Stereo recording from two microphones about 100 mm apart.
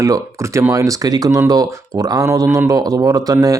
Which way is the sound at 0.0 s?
30° right (ahead or behind).